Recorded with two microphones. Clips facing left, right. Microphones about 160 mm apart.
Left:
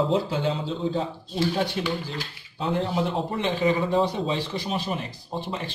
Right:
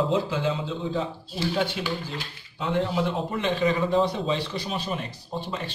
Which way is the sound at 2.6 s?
30° left (ahead or behind).